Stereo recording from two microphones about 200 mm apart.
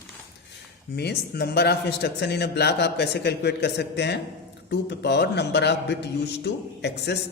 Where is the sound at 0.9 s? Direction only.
55° left (ahead or behind).